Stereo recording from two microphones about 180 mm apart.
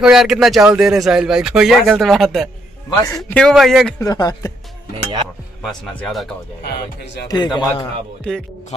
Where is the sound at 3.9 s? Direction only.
20° left (ahead or behind).